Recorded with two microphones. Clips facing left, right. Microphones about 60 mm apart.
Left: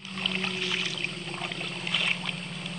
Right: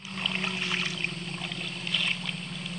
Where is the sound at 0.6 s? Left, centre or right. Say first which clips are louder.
Even; right.